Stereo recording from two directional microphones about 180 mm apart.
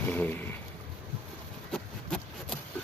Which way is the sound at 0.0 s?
10° left (ahead or behind).